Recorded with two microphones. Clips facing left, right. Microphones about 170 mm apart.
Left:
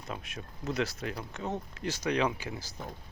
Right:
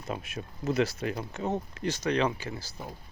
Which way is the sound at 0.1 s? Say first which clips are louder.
Right 5 dB; 5° right (ahead or behind).